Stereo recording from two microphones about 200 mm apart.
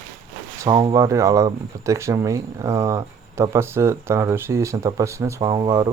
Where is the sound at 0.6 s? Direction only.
25° right (ahead or behind).